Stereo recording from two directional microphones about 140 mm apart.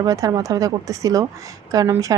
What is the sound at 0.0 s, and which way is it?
A woman's voice, 25° right (ahead or behind).